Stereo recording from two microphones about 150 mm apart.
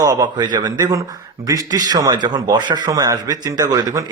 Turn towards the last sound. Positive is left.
turn(degrees=-25)  # may be behind; listen again after turning